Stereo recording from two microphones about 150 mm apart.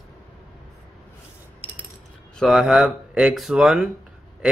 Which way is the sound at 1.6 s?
35° left (ahead or behind).